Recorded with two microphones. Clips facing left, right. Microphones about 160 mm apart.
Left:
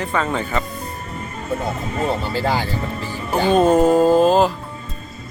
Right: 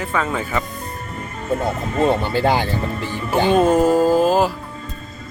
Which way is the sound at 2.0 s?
25° right (ahead or behind).